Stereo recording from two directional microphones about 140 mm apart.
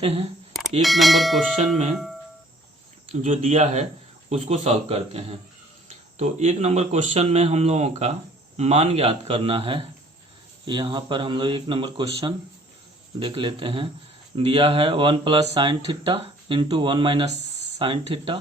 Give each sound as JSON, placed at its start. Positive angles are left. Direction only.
{"t": 0.0, "sound": "speech", "side_deg": -45}
{"t": 0.8, "sound": "speech", "side_deg": 0}
{"t": 3.1, "sound": "speech", "side_deg": -65}